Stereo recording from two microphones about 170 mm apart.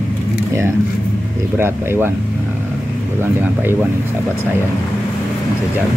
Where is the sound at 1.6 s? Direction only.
15° right (ahead or behind).